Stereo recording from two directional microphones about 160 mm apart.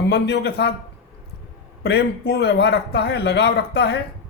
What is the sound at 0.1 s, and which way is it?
Speech, 90° left.